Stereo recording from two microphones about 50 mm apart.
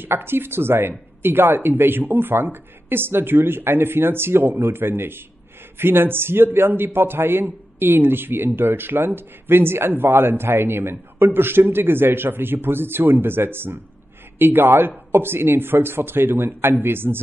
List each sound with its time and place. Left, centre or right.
0.0 s a man's voice: right